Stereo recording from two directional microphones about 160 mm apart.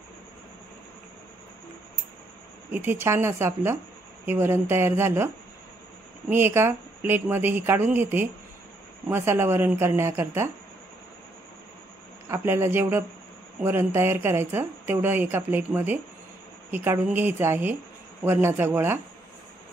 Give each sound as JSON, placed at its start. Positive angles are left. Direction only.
{"t": 2.7, "sound": "speech", "side_deg": -10}
{"t": 12.3, "sound": "speech", "side_deg": -15}